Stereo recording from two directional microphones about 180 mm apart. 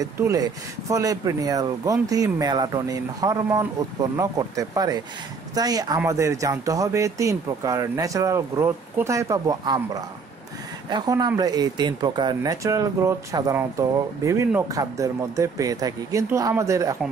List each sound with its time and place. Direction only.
0.0 s speech: 20° right (ahead or behind)